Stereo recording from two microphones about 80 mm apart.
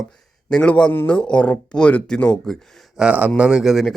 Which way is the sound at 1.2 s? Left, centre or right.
Centre.